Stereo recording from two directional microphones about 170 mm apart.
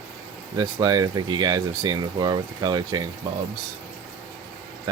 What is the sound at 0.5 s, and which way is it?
Speech, 25° right (ahead or behind).